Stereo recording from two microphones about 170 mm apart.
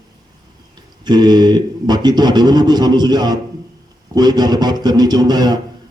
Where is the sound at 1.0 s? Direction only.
25° right (ahead or behind).